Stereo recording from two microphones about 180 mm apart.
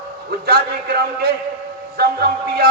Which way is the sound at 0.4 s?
60° right (ahead or behind).